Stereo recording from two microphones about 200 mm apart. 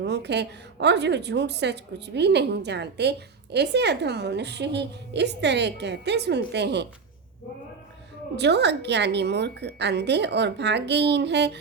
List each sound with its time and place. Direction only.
0.0 s a woman's voice: 60° right (ahead or behind)
8.4 s a woman's voice: 60° right (ahead or behind)